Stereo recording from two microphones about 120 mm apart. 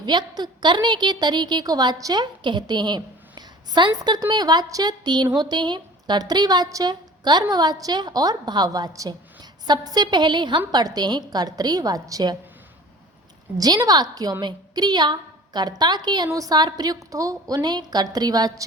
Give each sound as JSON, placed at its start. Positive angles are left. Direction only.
{"t": 0.0, "sound": "a woman's voice", "side_deg": -35}
{"t": 13.6, "sound": "a woman's voice", "side_deg": -30}